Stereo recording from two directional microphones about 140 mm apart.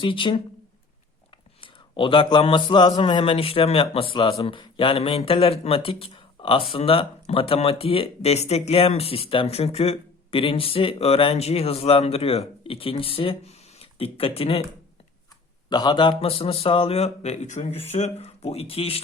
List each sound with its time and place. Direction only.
0.0 s speech: 35° left (ahead or behind)
1.6 s speech: 40° left (ahead or behind)
15.7 s speech: 30° left (ahead or behind)